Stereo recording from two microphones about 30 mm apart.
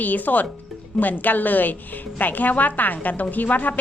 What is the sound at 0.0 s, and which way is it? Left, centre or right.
Speech, left.